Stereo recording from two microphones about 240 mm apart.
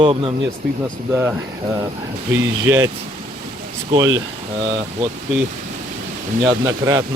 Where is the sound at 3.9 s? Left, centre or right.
Centre.